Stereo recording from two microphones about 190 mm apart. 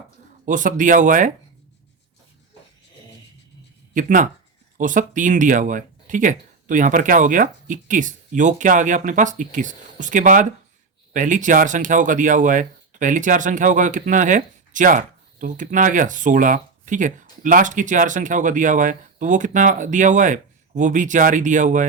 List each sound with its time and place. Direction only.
0.4 s speech: 45° right (ahead or behind)
3.9 s speech: 40° right (ahead or behind)